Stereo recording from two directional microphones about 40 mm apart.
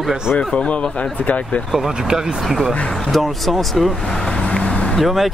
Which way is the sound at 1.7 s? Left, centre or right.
Centre.